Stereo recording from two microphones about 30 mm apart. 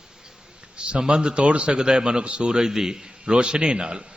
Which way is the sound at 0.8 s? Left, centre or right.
Right.